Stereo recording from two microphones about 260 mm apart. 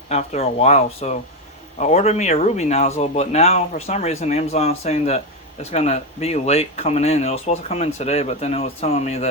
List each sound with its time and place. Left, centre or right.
0.1 s speech: left